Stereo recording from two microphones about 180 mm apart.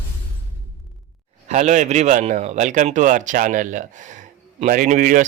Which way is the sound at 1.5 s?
40° right (ahead or behind).